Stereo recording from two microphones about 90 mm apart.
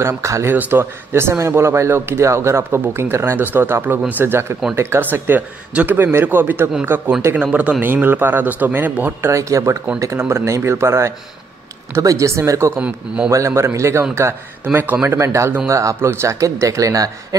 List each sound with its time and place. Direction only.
0.0 s speech: 35° right (ahead or behind)
7.3 s a man's voice: 15° right (ahead or behind)
9.3 s speech: 35° right (ahead or behind)
12.8 s a man's voice: 10° right (ahead or behind)
13.3 s speech: 35° right (ahead or behind)
15.0 s speech: 30° right (ahead or behind)